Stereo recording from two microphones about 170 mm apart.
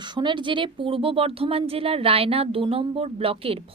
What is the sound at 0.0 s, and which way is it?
Speech, 25° right (ahead or behind).